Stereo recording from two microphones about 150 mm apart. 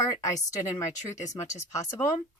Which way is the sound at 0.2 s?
20° left (ahead or behind).